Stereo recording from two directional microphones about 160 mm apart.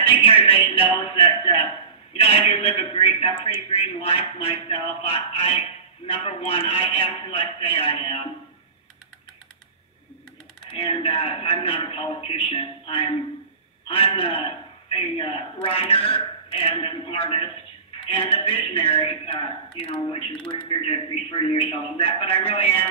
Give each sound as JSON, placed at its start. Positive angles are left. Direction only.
{"t": 0.0, "sound": "a man's voice", "side_deg": 35}
{"t": 10.7, "sound": "a man's voice", "side_deg": 35}